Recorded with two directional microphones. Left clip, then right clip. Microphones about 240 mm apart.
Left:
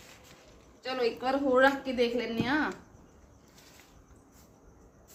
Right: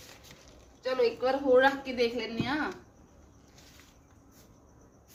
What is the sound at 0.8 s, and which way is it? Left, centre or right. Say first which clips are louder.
Speech: right 3 dB; centre.